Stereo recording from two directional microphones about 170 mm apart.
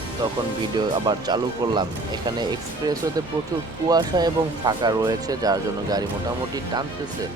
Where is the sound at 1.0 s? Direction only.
25° right (ahead or behind).